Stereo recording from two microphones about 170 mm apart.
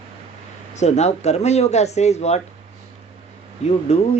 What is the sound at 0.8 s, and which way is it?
Speech, 40° left (ahead or behind).